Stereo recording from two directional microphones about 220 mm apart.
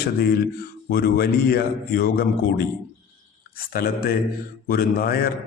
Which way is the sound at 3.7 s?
45° left (ahead or behind).